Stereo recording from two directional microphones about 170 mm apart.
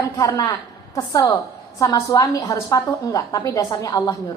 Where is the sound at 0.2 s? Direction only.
20° left (ahead or behind).